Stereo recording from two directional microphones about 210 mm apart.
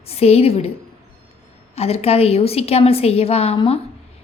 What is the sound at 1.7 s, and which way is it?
A woman's voice, 30° left (ahead or behind).